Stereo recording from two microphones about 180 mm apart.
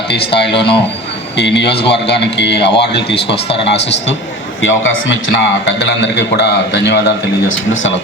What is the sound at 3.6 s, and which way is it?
Speech, 75° left (ahead or behind).